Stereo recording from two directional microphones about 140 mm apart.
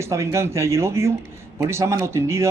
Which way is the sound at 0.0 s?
20° right (ahead or behind).